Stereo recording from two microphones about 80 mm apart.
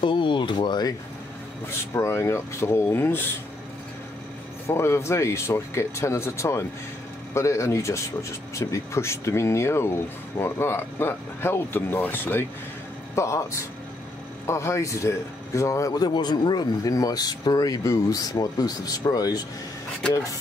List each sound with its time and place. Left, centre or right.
0.0 s speech: left
1.7 s speech: left
4.6 s speech: left
13.1 s speech: left